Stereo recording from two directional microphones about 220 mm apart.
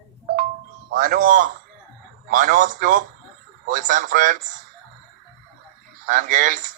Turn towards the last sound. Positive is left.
turn(degrees=-35)  # may be behind; listen again after turning